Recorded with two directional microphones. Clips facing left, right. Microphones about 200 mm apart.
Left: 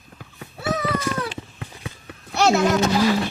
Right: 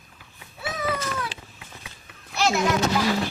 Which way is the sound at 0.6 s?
70° left (ahead or behind).